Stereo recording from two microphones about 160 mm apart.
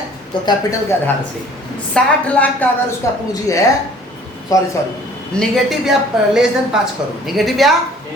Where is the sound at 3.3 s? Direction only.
20° left (ahead or behind).